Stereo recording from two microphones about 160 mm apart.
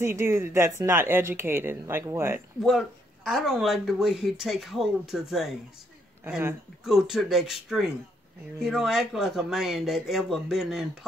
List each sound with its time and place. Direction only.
0.0 s speech: 15° right (ahead or behind)
3.3 s speech: 5° right (ahead or behind)
6.8 s speech: centre (ahead or behind)